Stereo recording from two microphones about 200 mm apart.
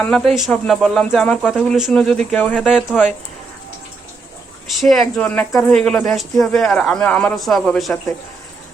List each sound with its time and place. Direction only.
0.0 s speech: centre (ahead or behind)
4.8 s speech: centre (ahead or behind)